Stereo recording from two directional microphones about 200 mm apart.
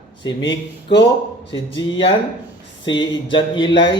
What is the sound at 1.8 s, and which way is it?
Speech, 25° left (ahead or behind).